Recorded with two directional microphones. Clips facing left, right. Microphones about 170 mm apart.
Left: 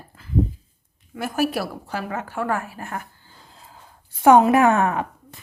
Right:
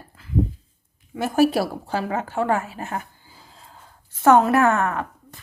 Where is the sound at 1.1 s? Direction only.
25° right (ahead or behind).